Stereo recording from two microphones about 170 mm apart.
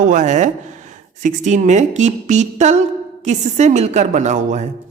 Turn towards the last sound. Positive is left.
turn(degrees=-45)  # may be behind; listen again after turning